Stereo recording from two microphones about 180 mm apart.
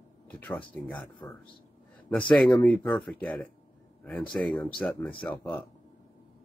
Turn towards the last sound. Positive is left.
turn(degrees=10)  # may be behind; listen again after turning